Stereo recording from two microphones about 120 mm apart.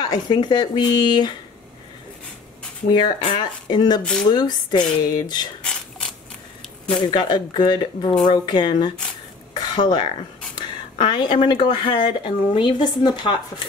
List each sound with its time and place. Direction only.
0.0 s speech: 35° left (ahead or behind)
2.9 s speech: 40° left (ahead or behind)
4.0 s speech: 10° left (ahead or behind)
4.3 s speech: 35° left (ahead or behind)
5.6 s mechanisms: 5° left (ahead or behind)
6.9 s speech: 40° left (ahead or behind)
9.6 s a sound: 40° left (ahead or behind)
11.0 s speech: 40° left (ahead or behind)